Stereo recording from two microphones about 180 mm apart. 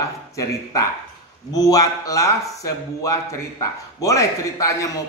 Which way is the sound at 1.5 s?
20° left (ahead or behind).